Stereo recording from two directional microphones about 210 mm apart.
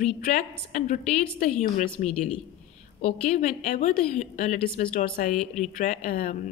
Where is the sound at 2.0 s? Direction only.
35° left (ahead or behind).